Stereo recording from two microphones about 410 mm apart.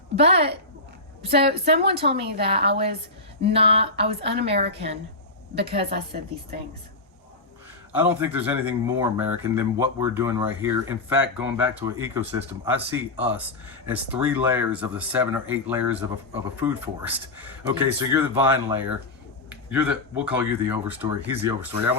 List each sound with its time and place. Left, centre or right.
0.2 s a woman's voice: centre
7.9 s speech: centre